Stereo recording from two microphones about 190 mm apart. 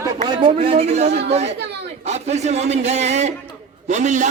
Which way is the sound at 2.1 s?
35° right (ahead or behind).